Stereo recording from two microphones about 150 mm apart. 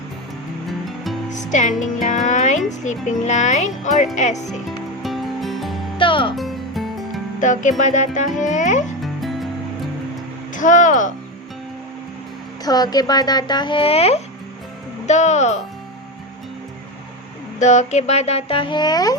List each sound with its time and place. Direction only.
1.3 s speech: 55° left (ahead or behind)
5.0 s music: centre (ahead or behind)
6.0 s music: 35° left (ahead or behind)
6.3 s music: centre (ahead or behind)
7.4 s speech: 55° left (ahead or behind)
9.0 s music: centre (ahead or behind)
10.5 s speech: 60° left (ahead or behind)
12.6 s speech: 25° left (ahead or behind); by 15.6 s 50° left (ahead or behind)
17.6 s speech: 50° left (ahead or behind); by 19.1 s 25° left (ahead or behind)